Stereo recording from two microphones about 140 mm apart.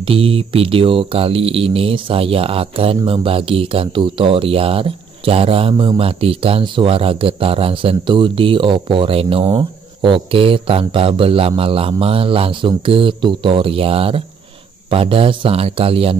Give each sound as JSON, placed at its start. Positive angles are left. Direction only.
{"t": 0.0, "sound": "speech", "side_deg": -40}